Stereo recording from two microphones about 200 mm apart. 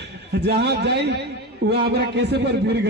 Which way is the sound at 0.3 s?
55° right (ahead or behind).